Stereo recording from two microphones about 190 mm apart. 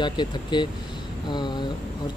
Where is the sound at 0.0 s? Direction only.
25° left (ahead or behind).